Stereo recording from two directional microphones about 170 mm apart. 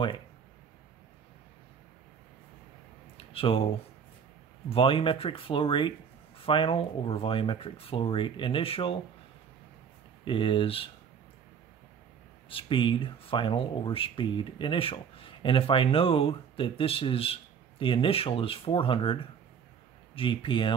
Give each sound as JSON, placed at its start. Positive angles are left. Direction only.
{"t": 3.3, "sound": "speech", "side_deg": 30}
{"t": 10.2, "sound": "speech", "side_deg": 30}
{"t": 12.4, "sound": "speech", "side_deg": 30}